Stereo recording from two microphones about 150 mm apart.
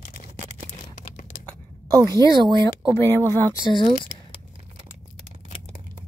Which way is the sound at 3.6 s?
30° left (ahead or behind).